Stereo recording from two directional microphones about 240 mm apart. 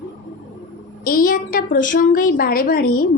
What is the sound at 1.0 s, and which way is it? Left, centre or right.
A woman's voice, left.